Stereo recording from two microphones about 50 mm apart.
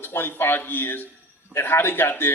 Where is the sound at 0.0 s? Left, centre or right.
Left.